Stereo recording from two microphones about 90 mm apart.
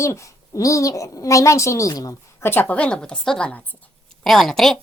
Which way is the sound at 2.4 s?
20° left (ahead or behind).